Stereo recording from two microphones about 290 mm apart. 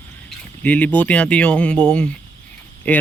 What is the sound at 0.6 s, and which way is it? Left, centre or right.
Speech, centre.